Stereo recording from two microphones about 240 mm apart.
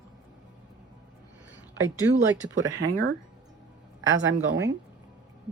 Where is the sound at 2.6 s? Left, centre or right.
Right.